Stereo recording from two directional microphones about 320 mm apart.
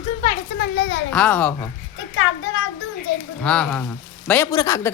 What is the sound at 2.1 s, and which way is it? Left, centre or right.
A child's voice, left.